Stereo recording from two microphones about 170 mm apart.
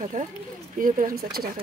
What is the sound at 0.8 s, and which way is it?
Speech, 55° right (ahead or behind).